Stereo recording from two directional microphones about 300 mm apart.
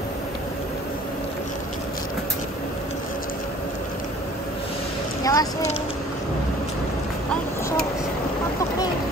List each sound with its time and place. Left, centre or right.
5.2 s speech: centre